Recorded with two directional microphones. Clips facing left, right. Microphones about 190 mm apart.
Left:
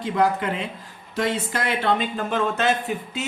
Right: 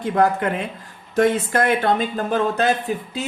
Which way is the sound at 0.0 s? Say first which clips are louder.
Right 3 dB; 50° right (ahead or behind).